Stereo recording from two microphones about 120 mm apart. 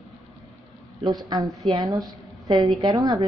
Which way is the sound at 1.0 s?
35° right (ahead or behind).